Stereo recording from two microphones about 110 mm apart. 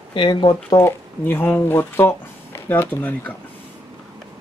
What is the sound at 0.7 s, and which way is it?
Speech, 20° left (ahead or behind).